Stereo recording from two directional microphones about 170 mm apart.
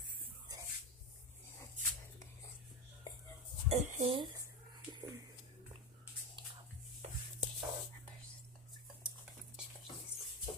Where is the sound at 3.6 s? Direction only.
40° right (ahead or behind).